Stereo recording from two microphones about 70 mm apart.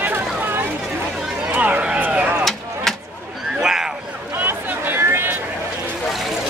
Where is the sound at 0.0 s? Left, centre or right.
Right.